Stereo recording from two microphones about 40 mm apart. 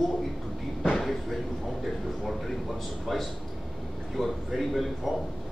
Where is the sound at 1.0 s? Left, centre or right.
Centre.